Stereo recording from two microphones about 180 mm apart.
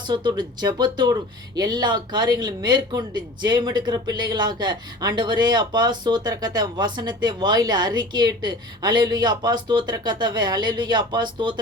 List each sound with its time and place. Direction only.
0.1 s speech: 25° right (ahead or behind)